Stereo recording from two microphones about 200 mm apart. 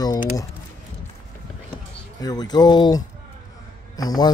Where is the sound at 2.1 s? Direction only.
20° left (ahead or behind).